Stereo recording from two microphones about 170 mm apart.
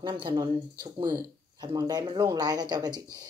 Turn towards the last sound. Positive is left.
turn(degrees=-25)  # may be behind; listen again after turning